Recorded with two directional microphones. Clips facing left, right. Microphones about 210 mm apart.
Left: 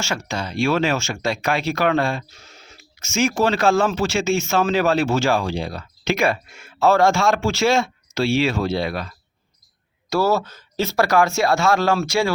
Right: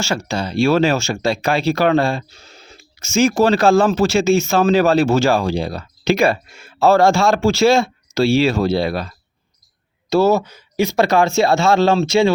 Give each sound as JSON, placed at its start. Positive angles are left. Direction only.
{"t": 0.0, "sound": "speech", "side_deg": -35}
{"t": 10.1, "sound": "speech", "side_deg": -20}